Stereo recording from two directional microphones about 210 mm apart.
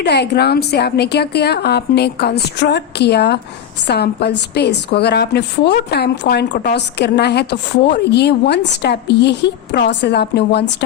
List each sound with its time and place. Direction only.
0.0 s a woman's voice: 50° left (ahead or behind)